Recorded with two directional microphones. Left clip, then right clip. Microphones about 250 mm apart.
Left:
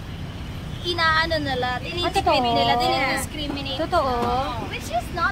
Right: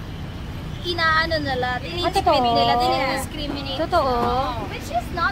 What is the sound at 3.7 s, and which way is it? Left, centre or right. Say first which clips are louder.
Speech: right 2 dB; centre.